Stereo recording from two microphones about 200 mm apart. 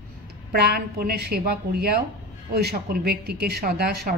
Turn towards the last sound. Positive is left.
turn(degrees=-50)  # may be behind; listen again after turning